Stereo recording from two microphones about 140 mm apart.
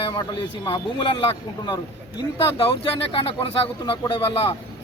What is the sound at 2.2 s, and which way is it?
A man's voice, 40° left (ahead or behind).